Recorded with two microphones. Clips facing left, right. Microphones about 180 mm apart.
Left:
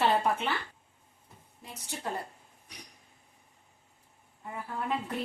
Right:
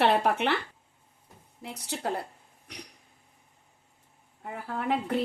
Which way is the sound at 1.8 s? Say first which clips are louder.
Right 4 dB; 70° right (ahead or behind).